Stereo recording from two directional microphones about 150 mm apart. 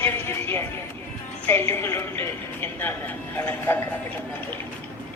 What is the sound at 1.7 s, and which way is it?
A man's voice, 15° left (ahead or behind).